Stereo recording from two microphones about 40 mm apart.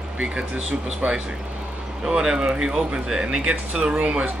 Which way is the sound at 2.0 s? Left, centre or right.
Centre.